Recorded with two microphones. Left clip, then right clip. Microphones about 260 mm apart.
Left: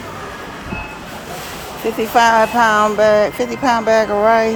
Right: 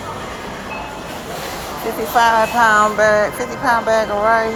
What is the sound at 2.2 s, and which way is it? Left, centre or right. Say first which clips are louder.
Speech: left 1 dB; left.